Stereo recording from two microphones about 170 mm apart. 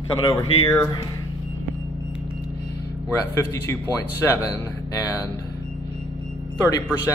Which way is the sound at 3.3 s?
15° left (ahead or behind).